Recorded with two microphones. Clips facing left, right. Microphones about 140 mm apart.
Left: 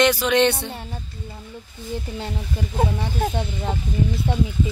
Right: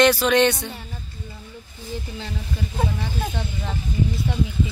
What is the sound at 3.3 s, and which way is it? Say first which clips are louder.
Speech: left 4 dB; 40° left (ahead or behind).